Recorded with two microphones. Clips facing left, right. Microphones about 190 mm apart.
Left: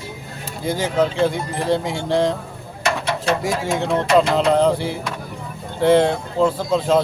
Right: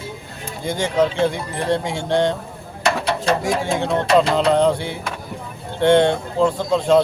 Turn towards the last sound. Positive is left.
turn(degrees=0)  # may be behind; listen again after turning